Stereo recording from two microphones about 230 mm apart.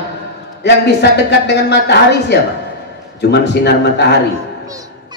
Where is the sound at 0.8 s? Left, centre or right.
Left.